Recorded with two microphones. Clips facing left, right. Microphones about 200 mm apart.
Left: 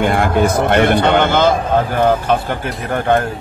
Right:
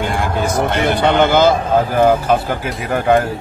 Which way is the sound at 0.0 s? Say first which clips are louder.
Left 5 dB; 60° left (ahead or behind).